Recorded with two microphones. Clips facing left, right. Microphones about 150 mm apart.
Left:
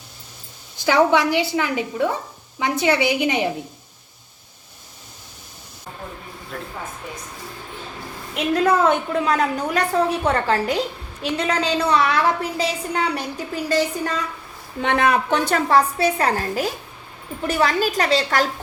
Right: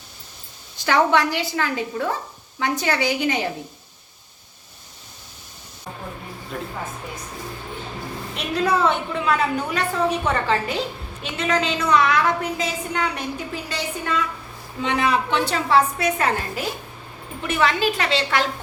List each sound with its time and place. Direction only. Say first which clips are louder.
0.9 s a woman's voice: left 2 dB; 15° left (ahead or behind)
6.5 s speech: right 2 dB; 5° right (ahead or behind)
8.6 s a woman's voice: left 1 dB; 45° left (ahead or behind)
14.8 s a woman's voice: left 2 dB; 55° left (ahead or behind)
16.0 s a woman's voice: left 2 dB; 30° left (ahead or behind)